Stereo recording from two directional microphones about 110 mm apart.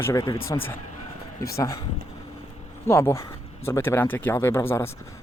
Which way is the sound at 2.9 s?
25° left (ahead or behind).